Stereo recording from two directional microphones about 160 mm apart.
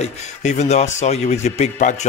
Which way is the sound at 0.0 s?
45° left (ahead or behind).